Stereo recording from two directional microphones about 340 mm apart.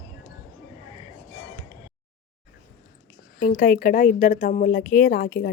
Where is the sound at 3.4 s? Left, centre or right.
Left.